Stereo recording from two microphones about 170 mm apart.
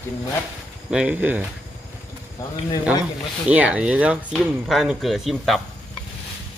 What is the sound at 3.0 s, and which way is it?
Speech, 10° right (ahead or behind).